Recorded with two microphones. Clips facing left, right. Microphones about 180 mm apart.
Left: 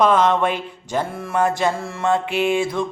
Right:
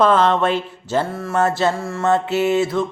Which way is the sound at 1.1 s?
Centre (ahead or behind).